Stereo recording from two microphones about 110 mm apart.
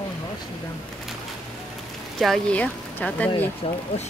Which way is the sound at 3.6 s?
65° left (ahead or behind).